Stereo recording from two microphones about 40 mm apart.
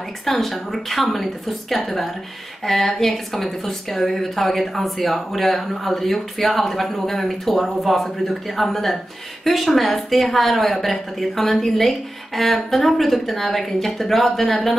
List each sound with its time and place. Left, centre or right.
0.2 s a woman's voice: centre
8.0 s a woman's voice: centre